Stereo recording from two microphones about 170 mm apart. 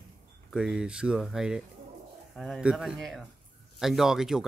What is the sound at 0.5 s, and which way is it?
Speech, 5° right (ahead or behind).